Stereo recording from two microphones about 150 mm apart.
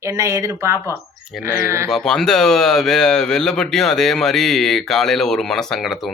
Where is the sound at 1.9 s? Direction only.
5° left (ahead or behind).